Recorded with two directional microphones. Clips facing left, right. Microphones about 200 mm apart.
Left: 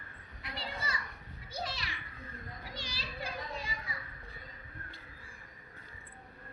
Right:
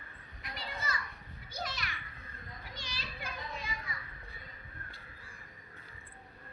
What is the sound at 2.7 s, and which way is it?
Children playing, 35° left (ahead or behind).